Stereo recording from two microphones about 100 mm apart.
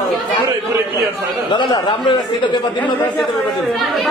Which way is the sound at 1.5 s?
50° left (ahead or behind).